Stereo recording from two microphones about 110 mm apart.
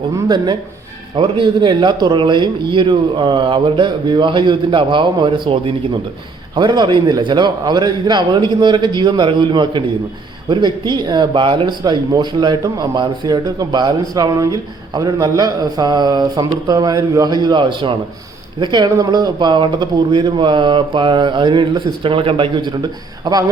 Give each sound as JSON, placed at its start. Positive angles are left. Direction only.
{"t": 1.1, "sound": "a man's voice", "side_deg": -50}